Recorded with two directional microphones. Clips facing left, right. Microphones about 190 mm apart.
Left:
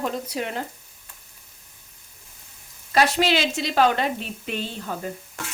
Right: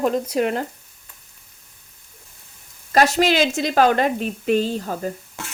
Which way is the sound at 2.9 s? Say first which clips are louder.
Right 3 dB; 45° right (ahead or behind).